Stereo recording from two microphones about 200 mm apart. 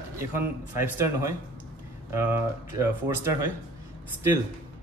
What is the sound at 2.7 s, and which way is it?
Speech, 15° right (ahead or behind).